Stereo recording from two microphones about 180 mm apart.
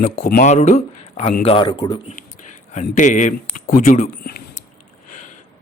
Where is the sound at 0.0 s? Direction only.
50° left (ahead or behind).